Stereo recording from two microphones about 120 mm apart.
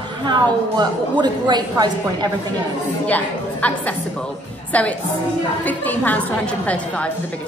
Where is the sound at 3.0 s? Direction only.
10° left (ahead or behind).